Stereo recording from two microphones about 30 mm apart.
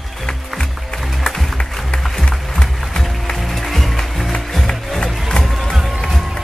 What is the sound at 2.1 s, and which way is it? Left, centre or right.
Music, centre.